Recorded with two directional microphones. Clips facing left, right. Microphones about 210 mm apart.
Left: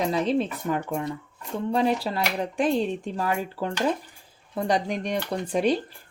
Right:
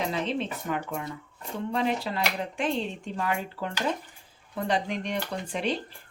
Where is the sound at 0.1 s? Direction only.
40° left (ahead or behind).